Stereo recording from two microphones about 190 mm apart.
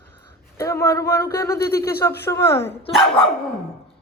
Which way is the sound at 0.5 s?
15° left (ahead or behind).